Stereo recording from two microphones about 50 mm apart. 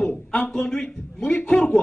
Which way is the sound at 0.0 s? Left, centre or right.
Left.